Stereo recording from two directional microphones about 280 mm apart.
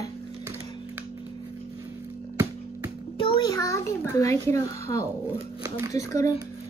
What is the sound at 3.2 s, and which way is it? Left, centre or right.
A child's voice, centre.